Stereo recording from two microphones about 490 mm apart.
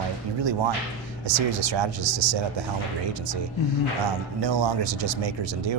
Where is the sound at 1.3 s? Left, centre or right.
Right.